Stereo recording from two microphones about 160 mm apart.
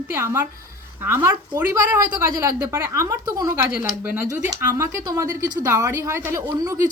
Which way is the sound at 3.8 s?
10° right (ahead or behind).